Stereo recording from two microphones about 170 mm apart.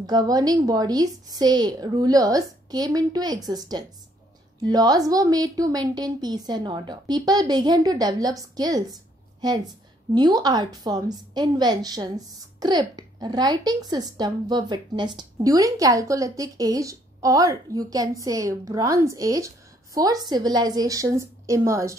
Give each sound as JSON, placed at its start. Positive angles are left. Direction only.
{"t": 0.0, "sound": "a woman's voice", "side_deg": -25}